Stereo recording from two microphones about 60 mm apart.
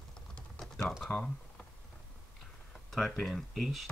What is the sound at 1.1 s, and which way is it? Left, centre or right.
Speech, left.